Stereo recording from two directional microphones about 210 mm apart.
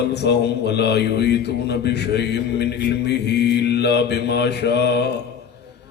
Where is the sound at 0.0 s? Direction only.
55° left (ahead or behind).